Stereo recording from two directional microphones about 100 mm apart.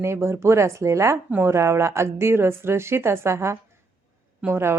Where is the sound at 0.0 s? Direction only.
25° right (ahead or behind).